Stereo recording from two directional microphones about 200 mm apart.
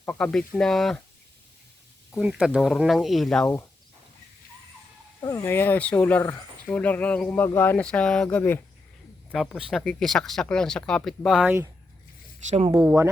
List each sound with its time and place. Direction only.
0.0 s speech: 5° left (ahead or behind)
2.1 s speech: 5° right (ahead or behind)
5.2 s speech: 15° left (ahead or behind); by 11.5 s centre (ahead or behind)
12.5 s speech: 35° right (ahead or behind)
12.8 s speech: 10° right (ahead or behind)